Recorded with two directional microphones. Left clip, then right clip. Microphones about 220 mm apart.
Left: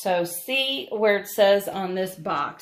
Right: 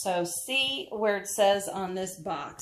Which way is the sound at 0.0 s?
25° left (ahead or behind).